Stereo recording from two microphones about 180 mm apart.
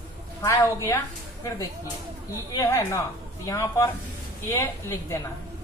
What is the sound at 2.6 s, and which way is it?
A woman's voice, 15° left (ahead or behind).